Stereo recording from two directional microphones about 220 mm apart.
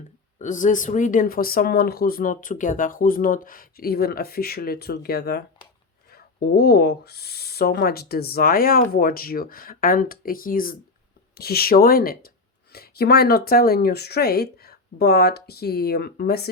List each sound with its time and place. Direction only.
0.3 s speech: 35° left (ahead or behind)